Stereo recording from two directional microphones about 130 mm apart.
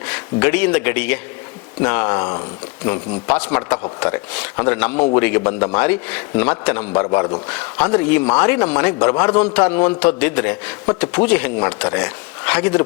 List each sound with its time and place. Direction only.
0.0 s a man's voice: 15° left (ahead or behind)
4.6 s a man's voice: 10° left (ahead or behind)